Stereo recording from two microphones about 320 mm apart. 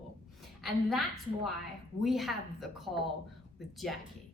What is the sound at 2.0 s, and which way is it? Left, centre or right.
Speech, centre.